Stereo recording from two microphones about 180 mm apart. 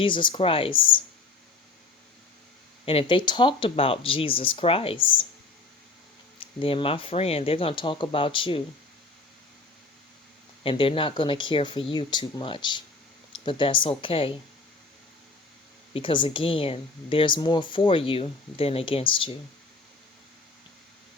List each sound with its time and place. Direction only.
0.0 s speech: 25° left (ahead or behind)
2.8 s speech: 30° left (ahead or behind)
6.4 s speech: 30° left (ahead or behind)
10.6 s speech: 30° left (ahead or behind)
15.9 s speech: 30° left (ahead or behind)